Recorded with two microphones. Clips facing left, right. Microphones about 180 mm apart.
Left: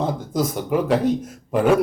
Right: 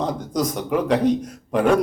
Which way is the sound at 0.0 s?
5° left (ahead or behind).